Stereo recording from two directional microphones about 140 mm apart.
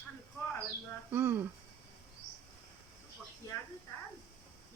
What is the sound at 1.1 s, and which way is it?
Speech, 15° right (ahead or behind).